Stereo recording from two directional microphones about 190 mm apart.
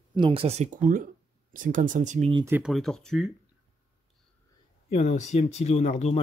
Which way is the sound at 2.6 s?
Centre (ahead or behind).